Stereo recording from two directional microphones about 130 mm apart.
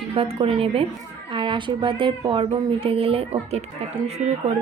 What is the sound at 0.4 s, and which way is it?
A woman's voice, 45° right (ahead or behind).